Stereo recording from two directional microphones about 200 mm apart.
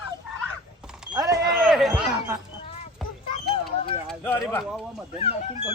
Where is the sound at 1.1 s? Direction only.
15° right (ahead or behind).